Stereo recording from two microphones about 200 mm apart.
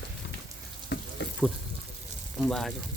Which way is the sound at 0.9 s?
55° left (ahead or behind).